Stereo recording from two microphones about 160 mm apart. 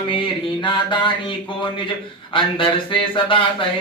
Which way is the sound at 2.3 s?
35° left (ahead or behind).